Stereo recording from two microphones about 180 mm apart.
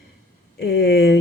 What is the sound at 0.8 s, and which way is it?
Speech, 65° left (ahead or behind).